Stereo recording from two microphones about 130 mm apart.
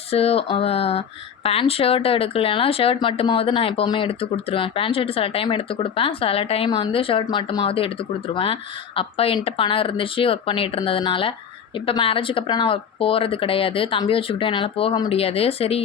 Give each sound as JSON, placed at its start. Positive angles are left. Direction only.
{"t": 0.1, "sound": "speech", "side_deg": 50}
{"t": 9.0, "sound": "speech", "side_deg": 45}